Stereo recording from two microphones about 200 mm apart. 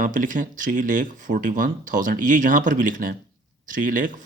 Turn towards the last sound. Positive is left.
turn(degrees=-40)  # may be behind; listen again after turning